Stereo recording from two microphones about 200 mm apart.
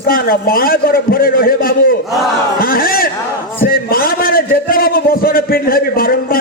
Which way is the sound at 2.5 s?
45° left (ahead or behind).